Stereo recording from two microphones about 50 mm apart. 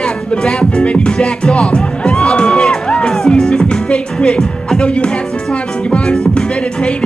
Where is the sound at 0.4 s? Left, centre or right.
Centre.